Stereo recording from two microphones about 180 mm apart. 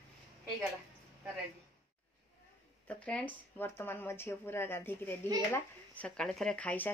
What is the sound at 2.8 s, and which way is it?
Speech, 10° left (ahead or behind).